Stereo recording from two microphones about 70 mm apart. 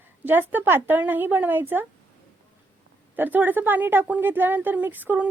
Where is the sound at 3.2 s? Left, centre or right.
Right.